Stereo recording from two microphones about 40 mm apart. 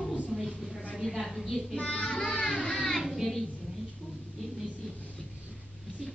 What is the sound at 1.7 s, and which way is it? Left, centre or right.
Child singing, left.